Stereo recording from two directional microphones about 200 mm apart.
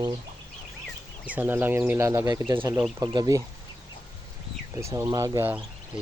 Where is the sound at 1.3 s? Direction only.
10° right (ahead or behind).